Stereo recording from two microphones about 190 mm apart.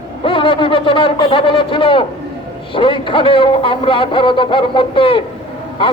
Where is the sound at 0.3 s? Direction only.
25° left (ahead or behind).